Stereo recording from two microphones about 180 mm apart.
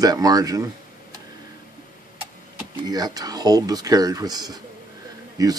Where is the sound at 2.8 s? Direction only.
20° right (ahead or behind).